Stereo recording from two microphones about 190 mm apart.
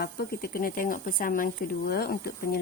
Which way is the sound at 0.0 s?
55° left (ahead or behind).